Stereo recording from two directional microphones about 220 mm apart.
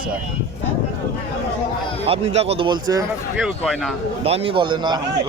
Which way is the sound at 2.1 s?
25° right (ahead or behind).